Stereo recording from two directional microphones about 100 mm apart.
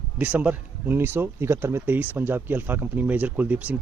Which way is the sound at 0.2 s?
15° right (ahead or behind).